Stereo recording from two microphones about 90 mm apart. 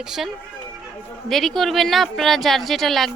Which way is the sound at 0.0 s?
5° right (ahead or behind).